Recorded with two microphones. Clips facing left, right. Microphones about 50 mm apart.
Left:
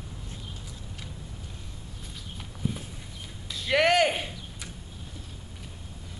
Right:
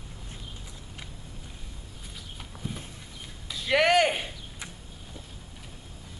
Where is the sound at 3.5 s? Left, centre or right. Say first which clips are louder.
Even; centre.